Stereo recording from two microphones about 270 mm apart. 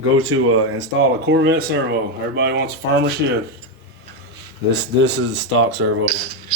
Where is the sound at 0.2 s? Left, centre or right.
Right.